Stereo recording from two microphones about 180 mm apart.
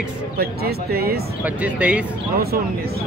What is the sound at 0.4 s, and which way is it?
Speech, 60° right (ahead or behind).